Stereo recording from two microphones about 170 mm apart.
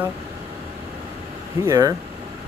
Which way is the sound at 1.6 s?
20° right (ahead or behind).